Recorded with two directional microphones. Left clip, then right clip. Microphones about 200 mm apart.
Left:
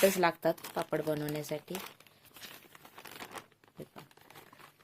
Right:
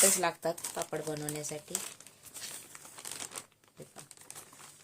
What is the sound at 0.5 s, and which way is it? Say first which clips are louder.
Speech: left 3 dB; 30° left (ahead or behind).